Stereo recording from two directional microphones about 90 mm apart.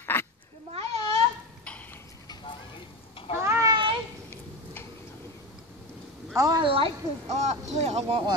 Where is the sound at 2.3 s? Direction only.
60° left (ahead or behind).